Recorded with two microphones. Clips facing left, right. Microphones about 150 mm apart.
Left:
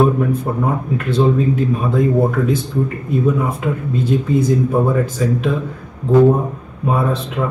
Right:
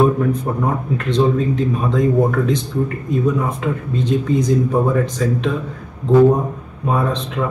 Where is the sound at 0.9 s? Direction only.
5° left (ahead or behind).